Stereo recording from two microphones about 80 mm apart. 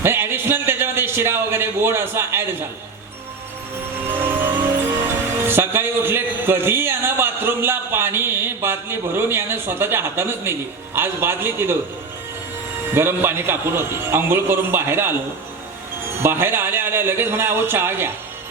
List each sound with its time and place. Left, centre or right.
0.0 s speech: right
5.0 s a man's voice: right
12.9 s a man's voice: right